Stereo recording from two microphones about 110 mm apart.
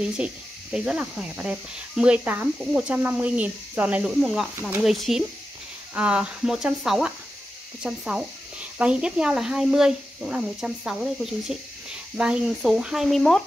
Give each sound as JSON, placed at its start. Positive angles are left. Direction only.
{"t": 0.2, "sound": "speech", "side_deg": -10}
{"t": 4.2, "sound": "speech", "side_deg": -5}
{"t": 4.6, "sound": "speech", "side_deg": -20}
{"t": 4.8, "sound": "speech", "side_deg": 0}